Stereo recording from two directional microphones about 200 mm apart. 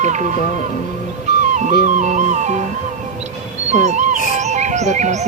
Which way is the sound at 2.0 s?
35° right (ahead or behind).